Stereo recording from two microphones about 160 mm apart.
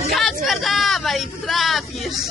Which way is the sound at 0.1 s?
Centre (ahead or behind).